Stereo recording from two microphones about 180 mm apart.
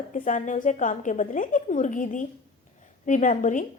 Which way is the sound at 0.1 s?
45° left (ahead or behind).